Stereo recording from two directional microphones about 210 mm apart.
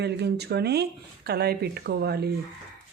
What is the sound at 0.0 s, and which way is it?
Speech, 50° right (ahead or behind).